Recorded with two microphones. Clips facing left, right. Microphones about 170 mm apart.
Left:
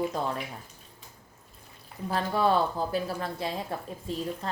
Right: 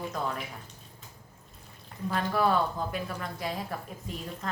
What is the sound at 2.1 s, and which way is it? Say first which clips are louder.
Speech: left 1 dB; 30° left (ahead or behind).